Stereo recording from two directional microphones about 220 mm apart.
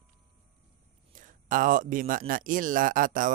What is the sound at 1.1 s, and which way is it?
Speech, 35° right (ahead or behind).